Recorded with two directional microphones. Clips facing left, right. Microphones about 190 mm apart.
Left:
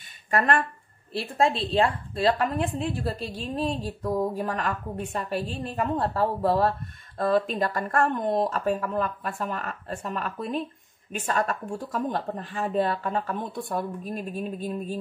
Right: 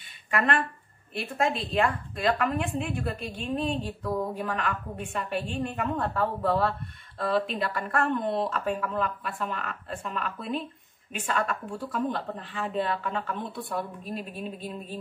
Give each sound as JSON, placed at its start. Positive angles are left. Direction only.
{"t": 0.3, "sound": "a woman's voice", "side_deg": 40}